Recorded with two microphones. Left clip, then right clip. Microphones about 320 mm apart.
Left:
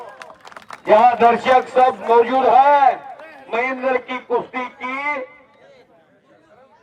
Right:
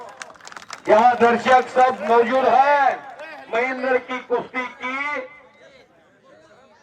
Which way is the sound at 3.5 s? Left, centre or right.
Left.